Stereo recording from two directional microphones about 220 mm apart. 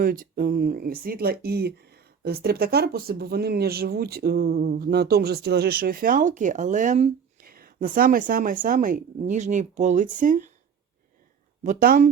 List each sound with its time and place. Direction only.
0.0 s speech: 40° right (ahead or behind)
11.6 s speech: 35° right (ahead or behind)